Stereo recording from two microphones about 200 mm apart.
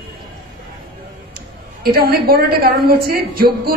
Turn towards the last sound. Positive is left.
turn(degrees=-50)  # may be behind; listen again after turning